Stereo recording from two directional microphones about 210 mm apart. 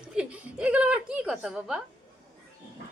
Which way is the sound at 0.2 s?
5° right (ahead or behind).